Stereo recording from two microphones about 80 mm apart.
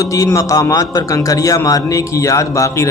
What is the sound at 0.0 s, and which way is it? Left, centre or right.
A man's voice, left.